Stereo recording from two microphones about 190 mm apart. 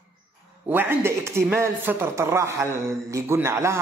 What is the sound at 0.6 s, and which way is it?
Speech, 10° right (ahead or behind).